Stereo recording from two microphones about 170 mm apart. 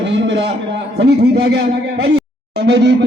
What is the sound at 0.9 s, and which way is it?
Speech, 75° right (ahead or behind).